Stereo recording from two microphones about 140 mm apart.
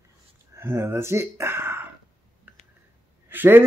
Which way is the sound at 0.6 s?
15° right (ahead or behind).